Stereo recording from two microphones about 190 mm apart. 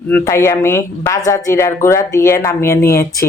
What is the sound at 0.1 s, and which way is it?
Speech, 15° left (ahead or behind).